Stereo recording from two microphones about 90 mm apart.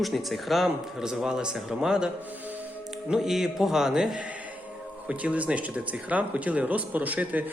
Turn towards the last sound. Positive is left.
turn(degrees=-20)  # may be behind; listen again after turning